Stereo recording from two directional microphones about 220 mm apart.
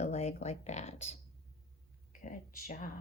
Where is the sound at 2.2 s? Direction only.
40° left (ahead or behind).